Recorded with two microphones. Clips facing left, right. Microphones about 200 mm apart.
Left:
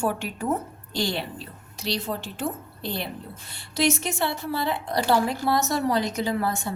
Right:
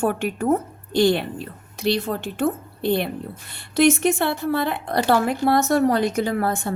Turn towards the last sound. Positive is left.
turn(degrees=-55)  # may be behind; listen again after turning